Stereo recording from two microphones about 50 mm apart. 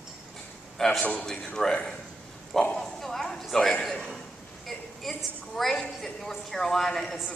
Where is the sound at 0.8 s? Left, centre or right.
Centre.